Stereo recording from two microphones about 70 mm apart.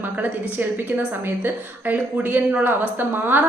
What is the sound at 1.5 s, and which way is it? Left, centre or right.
A woman's voice, right.